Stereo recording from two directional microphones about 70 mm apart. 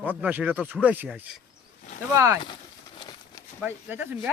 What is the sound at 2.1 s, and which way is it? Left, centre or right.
Speech, right.